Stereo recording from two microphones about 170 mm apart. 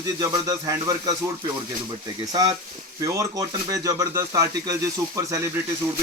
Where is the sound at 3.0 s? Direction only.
20° right (ahead or behind).